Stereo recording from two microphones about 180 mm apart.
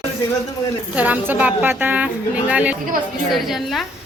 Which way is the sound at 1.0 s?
10° right (ahead or behind).